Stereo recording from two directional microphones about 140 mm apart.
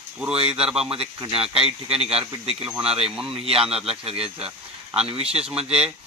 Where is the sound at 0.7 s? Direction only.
40° right (ahead or behind).